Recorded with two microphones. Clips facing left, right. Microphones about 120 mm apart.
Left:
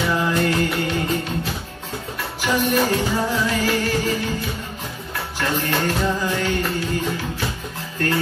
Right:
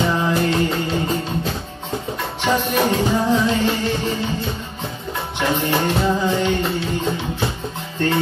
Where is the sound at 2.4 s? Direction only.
30° right (ahead or behind).